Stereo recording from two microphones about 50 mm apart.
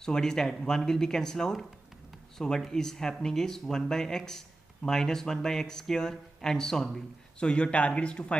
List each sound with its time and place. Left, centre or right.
0.0 s speech: centre
7.3 s a man's voice: left